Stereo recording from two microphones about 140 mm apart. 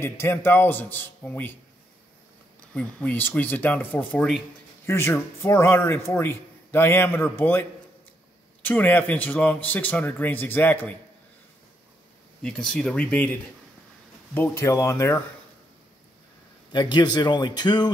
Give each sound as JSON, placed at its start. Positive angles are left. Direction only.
{"t": 0.0, "sound": "a man's voice", "side_deg": 15}
{"t": 2.7, "sound": "a man's voice", "side_deg": 10}
{"t": 8.6, "sound": "a man's voice", "side_deg": 15}
{"t": 12.4, "sound": "a man's voice", "side_deg": 5}
{"t": 16.7, "sound": "speech", "side_deg": 30}